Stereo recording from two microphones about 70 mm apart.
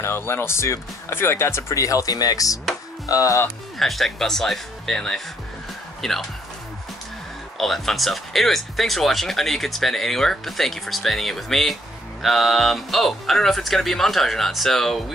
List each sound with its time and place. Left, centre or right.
0.0 s speech: left
3.4 s speech: centre
7.5 s speech: centre